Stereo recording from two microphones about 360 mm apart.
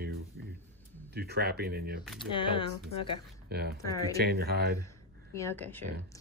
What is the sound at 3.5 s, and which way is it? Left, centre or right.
Speech, right.